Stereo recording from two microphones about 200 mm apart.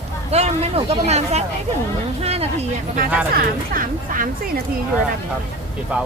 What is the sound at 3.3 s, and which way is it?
Speech, 45° right (ahead or behind).